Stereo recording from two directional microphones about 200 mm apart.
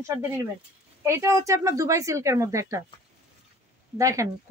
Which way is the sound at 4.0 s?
15° right (ahead or behind).